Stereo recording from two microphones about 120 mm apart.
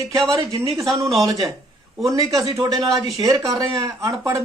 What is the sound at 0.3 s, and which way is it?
Speech, 25° right (ahead or behind).